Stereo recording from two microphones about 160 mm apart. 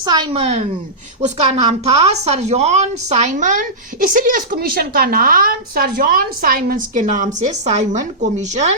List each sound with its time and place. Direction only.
0.0 s a woman's voice: 25° right (ahead or behind)
0.3 s a woman's voice: 40° right (ahead or behind)